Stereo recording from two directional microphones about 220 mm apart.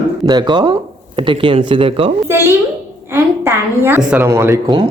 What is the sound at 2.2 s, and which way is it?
A woman's voice, 10° right (ahead or behind).